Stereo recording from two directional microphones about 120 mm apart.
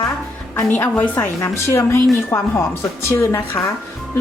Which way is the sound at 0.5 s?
20° left (ahead or behind).